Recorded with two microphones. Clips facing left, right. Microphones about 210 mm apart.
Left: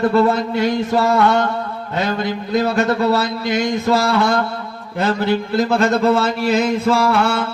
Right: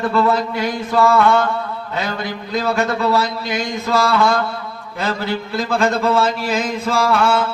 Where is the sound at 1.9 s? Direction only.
50° left (ahead or behind).